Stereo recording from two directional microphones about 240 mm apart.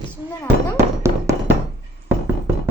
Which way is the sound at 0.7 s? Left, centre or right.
Centre.